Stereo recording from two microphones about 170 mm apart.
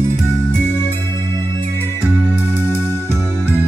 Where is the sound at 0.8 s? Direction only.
15° left (ahead or behind).